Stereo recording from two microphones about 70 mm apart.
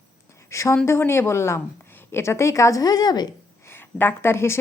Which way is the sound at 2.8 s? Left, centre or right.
Left.